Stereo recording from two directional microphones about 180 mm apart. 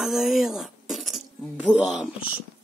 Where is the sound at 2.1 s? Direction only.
30° left (ahead or behind).